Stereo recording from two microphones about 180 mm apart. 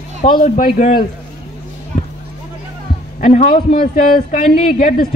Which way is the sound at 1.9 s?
45° left (ahead or behind).